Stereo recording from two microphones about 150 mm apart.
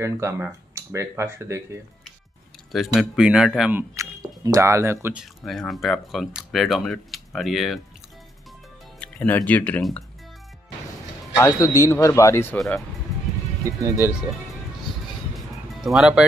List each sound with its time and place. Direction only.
0.0 s speech: 20° right (ahead or behind)
2.7 s speech: centre (ahead or behind)
3.9 s a sound: 20° right (ahead or behind)
4.4 s speech: 20° right (ahead or behind)
5.1 s speech: centre (ahead or behind)
9.0 s music: 10° left (ahead or behind)
9.5 s speech: 10° left (ahead or behind)
11.4 s speech: 20° left (ahead or behind)
12.5 s speech: centre (ahead or behind)
14.0 s speech: 10° right (ahead or behind)
15.8 s speech: centre (ahead or behind)